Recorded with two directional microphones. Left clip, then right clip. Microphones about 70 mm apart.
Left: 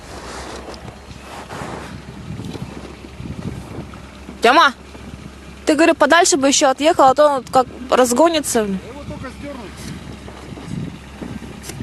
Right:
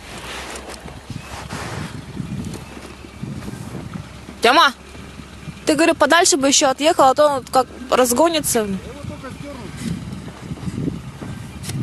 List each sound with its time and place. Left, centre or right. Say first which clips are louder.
1.4 s waves: left 1 dB; right
4.4 s speech: left 1 dB; centre